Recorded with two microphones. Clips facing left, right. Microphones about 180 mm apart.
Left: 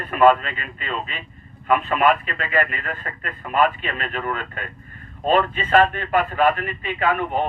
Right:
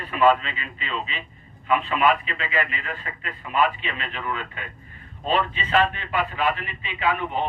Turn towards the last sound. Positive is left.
turn(degrees=50)  # may be behind; listen again after turning